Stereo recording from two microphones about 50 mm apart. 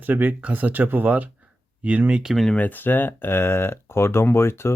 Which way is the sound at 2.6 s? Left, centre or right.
Left.